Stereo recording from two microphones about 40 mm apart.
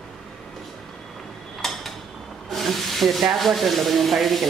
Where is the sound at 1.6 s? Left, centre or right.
Centre.